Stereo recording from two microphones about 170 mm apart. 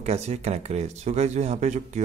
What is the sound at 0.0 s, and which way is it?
Speech, 40° right (ahead or behind).